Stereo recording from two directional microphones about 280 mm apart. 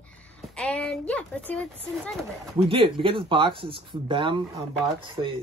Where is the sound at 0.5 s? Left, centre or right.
Centre.